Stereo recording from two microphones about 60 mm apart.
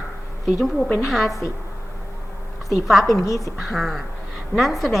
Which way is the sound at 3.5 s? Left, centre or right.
Centre.